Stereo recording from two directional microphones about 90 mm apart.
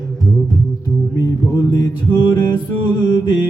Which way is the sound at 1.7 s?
55° left (ahead or behind).